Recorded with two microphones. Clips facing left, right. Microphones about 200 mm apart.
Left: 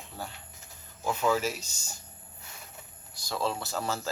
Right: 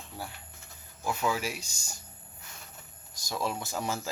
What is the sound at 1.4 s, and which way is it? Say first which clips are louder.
Speech: left 3 dB; 10° right (ahead or behind).